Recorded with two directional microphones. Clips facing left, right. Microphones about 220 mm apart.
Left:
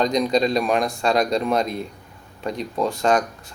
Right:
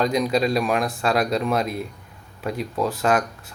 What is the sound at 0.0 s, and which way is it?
Speech, 5° right (ahead or behind).